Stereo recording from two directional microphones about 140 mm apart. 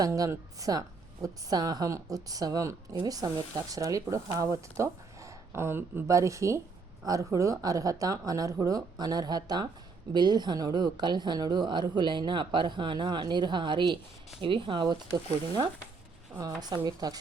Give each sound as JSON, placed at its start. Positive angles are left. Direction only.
{"t": 0.0, "sound": "a woman's voice", "side_deg": -20}